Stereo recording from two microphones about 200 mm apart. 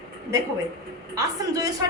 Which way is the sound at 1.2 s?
20° right (ahead or behind).